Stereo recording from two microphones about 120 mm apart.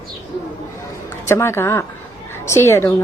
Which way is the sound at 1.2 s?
20° left (ahead or behind).